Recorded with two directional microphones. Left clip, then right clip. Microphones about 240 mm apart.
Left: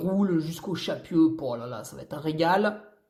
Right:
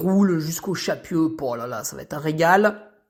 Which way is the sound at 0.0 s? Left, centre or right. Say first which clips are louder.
Right 5 dB; right.